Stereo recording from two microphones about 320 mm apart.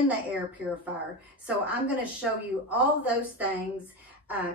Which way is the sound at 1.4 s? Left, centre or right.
Centre.